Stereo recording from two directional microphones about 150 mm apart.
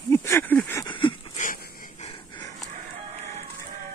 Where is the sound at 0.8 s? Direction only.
35° left (ahead or behind).